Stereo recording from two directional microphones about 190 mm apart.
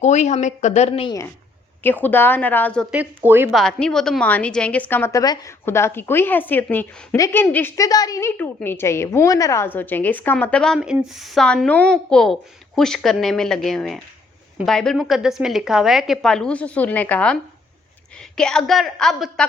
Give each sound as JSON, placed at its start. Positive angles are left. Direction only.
{"t": 0.0, "sound": "a woman's voice", "side_deg": 40}
{"t": 1.8, "sound": "a woman's voice", "side_deg": 10}
{"t": 2.9, "sound": "speech", "side_deg": -10}
{"t": 3.5, "sound": "a woman's voice", "side_deg": 5}